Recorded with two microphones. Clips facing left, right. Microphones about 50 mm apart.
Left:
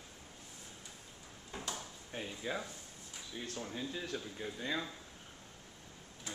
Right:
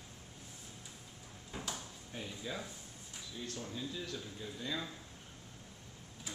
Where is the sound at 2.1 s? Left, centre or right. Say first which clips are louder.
Left 3 dB; left.